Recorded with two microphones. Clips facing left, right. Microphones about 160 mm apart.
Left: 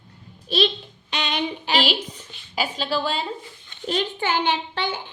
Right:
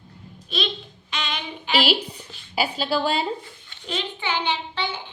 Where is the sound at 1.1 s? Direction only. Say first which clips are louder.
Left 5 dB; 35° left (ahead or behind).